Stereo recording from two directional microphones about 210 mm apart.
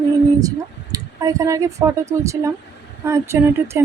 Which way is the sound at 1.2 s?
15° right (ahead or behind).